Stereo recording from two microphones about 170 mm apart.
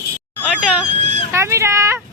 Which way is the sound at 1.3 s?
15° right (ahead or behind).